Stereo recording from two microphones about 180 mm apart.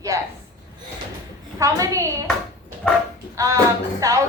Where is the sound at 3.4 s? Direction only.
15° right (ahead or behind).